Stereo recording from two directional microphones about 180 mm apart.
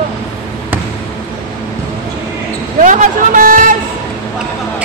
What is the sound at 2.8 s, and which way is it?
Speech, 45° right (ahead or behind).